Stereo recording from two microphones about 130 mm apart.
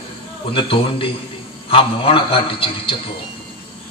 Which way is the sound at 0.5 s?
40° left (ahead or behind).